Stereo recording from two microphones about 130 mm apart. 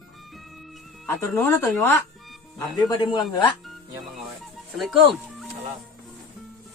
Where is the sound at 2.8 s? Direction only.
35° left (ahead or behind).